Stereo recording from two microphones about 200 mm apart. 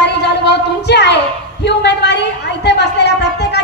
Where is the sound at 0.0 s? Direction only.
55° left (ahead or behind).